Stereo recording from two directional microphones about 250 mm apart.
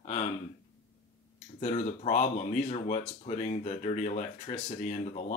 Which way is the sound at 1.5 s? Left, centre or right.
Left.